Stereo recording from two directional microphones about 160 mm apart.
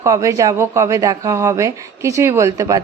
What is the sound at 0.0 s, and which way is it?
Speech, 20° right (ahead or behind).